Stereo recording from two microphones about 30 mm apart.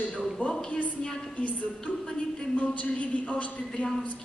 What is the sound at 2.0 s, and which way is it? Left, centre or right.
A man's voice, left.